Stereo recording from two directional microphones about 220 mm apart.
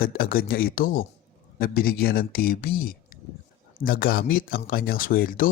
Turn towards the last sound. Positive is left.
turn(degrees=40)  # may be behind; listen again after turning